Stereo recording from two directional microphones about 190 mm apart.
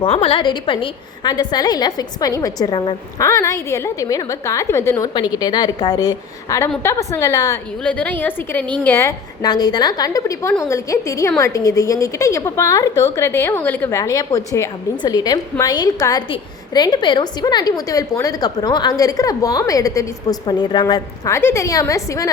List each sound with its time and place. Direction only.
0.0 s a woman's voice: 30° left (ahead or behind)